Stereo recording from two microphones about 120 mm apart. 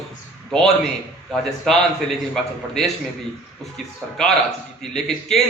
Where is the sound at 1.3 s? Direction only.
5° left (ahead or behind).